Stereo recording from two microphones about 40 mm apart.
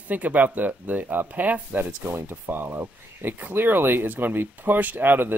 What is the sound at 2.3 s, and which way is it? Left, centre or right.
Speech, right.